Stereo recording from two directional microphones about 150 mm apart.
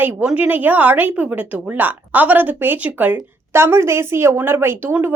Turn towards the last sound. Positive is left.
turn(degrees=-15)  # may be behind; listen again after turning